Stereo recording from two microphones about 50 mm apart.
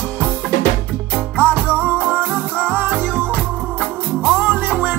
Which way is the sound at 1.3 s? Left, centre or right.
Right.